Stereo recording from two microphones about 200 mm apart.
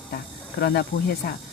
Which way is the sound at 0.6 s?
50° left (ahead or behind).